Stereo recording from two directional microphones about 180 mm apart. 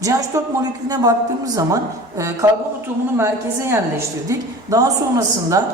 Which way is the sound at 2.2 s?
15° right (ahead or behind).